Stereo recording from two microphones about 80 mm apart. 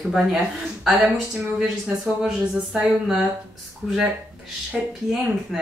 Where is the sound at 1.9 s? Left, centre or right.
Right.